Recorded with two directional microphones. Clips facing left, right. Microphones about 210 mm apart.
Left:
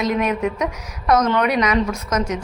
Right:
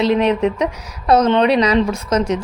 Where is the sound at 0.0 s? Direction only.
30° right (ahead or behind).